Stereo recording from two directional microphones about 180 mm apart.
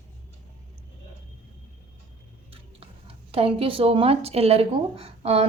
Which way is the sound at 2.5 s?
30° right (ahead or behind).